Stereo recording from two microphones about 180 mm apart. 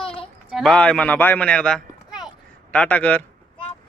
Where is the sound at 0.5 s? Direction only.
5° left (ahead or behind).